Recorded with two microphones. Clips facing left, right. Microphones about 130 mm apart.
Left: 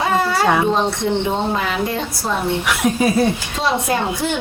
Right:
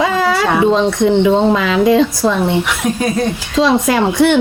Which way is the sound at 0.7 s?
90° right.